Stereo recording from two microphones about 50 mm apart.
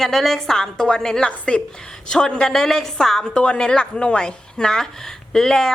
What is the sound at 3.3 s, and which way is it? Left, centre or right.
A woman's voice, left.